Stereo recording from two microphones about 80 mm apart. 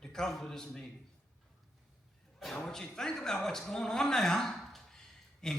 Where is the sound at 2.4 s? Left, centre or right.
Centre.